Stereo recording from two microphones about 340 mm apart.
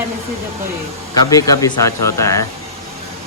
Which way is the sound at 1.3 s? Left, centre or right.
Centre.